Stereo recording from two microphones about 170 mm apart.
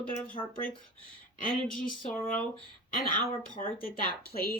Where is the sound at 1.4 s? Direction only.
60° left (ahead or behind).